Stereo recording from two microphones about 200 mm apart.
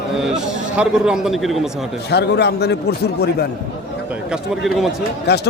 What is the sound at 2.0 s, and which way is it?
Speech, 55° left (ahead or behind).